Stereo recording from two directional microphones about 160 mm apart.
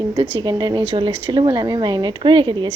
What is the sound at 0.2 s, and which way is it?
A woman's voice, 30° right (ahead or behind).